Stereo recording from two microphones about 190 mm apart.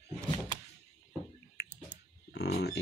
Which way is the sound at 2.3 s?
60° left (ahead or behind).